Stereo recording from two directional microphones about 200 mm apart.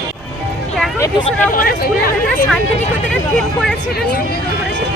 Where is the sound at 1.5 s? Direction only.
45° left (ahead or behind).